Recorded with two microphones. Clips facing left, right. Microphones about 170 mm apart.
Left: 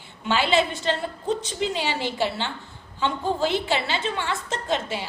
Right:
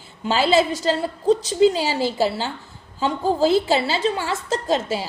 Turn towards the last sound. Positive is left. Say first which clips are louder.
# right 5 dB
turn(degrees=-35)  # may be behind; listen again after turning